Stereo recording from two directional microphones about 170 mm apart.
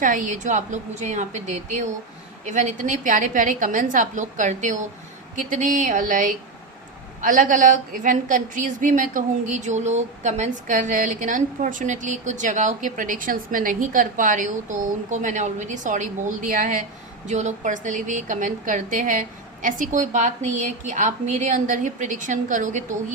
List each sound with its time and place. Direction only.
0.0 s a woman's voice: 50° right (ahead or behind)